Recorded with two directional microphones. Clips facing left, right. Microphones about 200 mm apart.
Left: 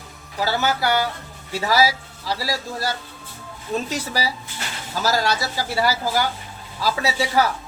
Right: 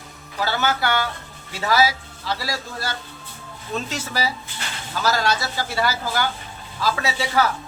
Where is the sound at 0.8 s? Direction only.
35° left (ahead or behind).